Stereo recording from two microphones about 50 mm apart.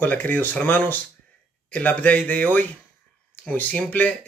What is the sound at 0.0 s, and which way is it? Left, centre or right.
Speech, left.